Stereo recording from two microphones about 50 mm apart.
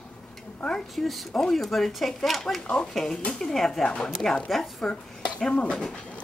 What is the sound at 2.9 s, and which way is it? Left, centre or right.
Speech, centre.